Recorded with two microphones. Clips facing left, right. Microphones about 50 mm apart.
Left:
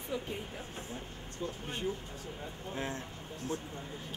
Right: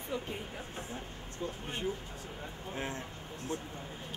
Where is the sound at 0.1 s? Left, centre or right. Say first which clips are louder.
Even; centre.